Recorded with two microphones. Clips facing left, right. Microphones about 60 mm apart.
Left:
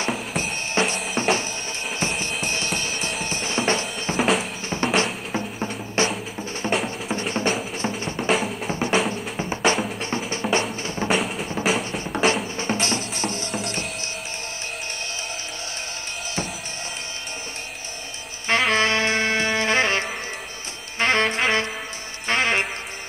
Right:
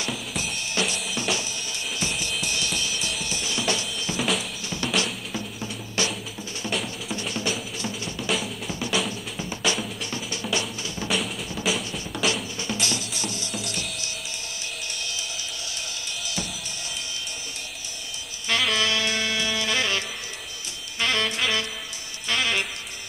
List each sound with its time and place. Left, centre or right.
0.4 s drum kit: left
2.0 s music: left
2.4 s drum kit: left
4.2 s drum kit: left
4.6 s drum: left
6.6 s music: left
7.1 s drum: left
8.3 s drum: left
8.6 s drum: left
9.1 s music: left
11.1 s drum: left
11.6 s music: left
12.0 s music: left
18.5 s saxophone: left